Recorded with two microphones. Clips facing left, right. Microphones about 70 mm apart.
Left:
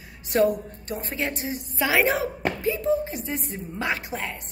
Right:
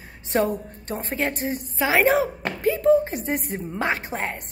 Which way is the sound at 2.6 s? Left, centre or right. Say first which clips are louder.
Right 7 dB; right.